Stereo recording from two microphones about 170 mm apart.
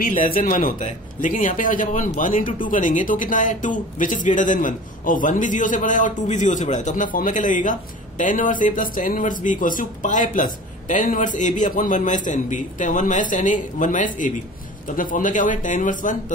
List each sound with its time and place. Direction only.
0.0 s speech: 55° left (ahead or behind)